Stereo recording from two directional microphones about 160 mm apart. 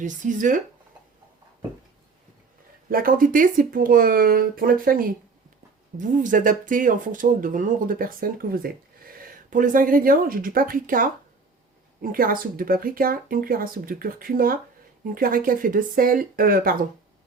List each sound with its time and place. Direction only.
0.0 s speech: 50° right (ahead or behind)
2.9 s speech: 60° right (ahead or behind)
6.0 s speech: 55° right (ahead or behind)